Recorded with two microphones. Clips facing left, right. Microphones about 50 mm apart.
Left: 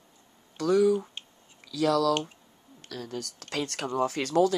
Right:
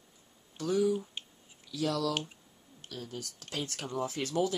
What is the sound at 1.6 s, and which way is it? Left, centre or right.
Speech, left.